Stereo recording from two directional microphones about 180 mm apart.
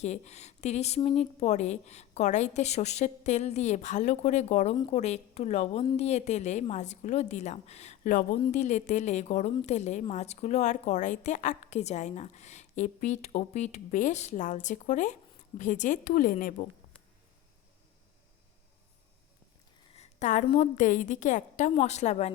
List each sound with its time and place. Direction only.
0.0 s a woman's voice: 40° left (ahead or behind)
8.4 s a woman's voice: 35° left (ahead or behind)
19.9 s a woman's voice: 40° left (ahead or behind)